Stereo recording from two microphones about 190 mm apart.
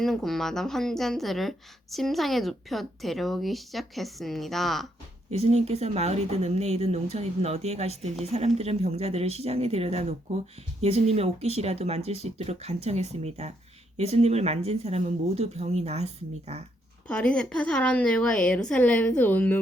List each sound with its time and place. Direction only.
0.0 s a woman's voice: centre (ahead or behind)
5.3 s speech: 35° right (ahead or behind)
17.1 s a woman's voice: 5° left (ahead or behind)